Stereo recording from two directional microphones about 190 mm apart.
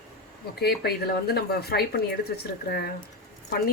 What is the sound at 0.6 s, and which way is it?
A woman's voice, 55° left (ahead or behind).